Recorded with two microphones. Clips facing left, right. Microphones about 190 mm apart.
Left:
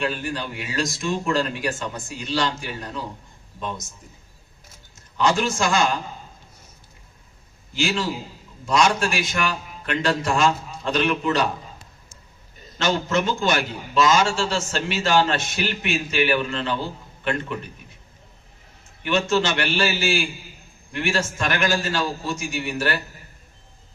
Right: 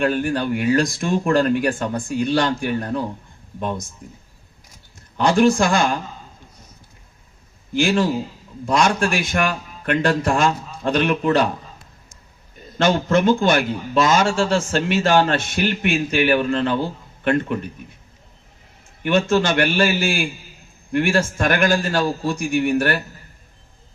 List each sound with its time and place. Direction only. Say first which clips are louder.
0.0 s speech: right 7 dB; 55° right (ahead or behind)
5.1 s speech: right 6 dB; 55° right (ahead or behind)
7.7 s a man's voice: right 6 dB; 55° right (ahead or behind)
12.8 s a man's voice: right 5 dB; 55° right (ahead or behind)
19.0 s a man's voice: right 4 dB; 50° right (ahead or behind)